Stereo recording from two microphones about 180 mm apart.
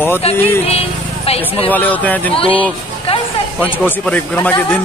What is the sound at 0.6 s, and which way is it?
Vehicle, 35° left (ahead or behind).